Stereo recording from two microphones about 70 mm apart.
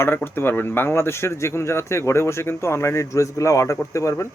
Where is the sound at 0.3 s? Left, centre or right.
Left.